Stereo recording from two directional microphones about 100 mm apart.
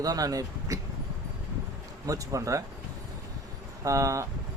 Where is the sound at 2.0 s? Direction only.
35° right (ahead or behind).